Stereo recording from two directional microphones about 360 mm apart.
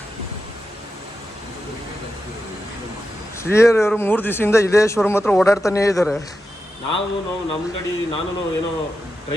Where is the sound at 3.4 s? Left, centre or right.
Centre.